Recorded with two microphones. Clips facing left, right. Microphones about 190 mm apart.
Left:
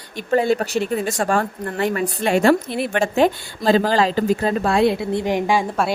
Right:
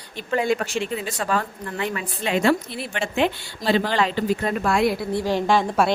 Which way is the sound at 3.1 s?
40° left (ahead or behind).